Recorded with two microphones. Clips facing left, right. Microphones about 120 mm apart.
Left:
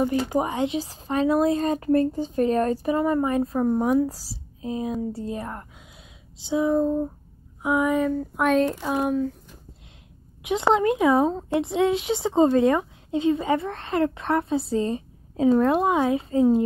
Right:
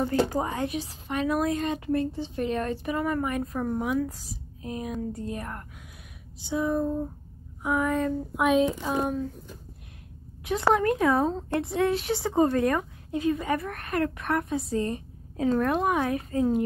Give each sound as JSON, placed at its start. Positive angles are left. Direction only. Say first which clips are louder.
{"t": 0.0, "sound": "a woman's voice", "louder": "left 2 dB", "side_deg": 15}
{"t": 7.9, "sound": "speech", "louder": "left 4 dB", "side_deg": 0}
{"t": 10.4, "sound": "a woman's voice", "louder": "left 3 dB", "side_deg": 20}